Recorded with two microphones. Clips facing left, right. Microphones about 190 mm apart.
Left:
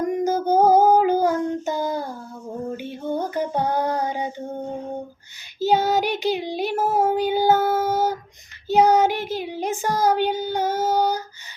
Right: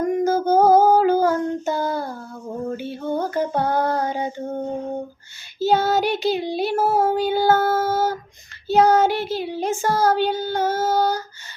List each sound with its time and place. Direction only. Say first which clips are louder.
0.0 s female singing: right 2 dB; 15° left (ahead or behind)
2.7 s a sound: right 1 dB; 15° left (ahead or behind)
5.5 s child singing: right 1 dB; 15° left (ahead or behind)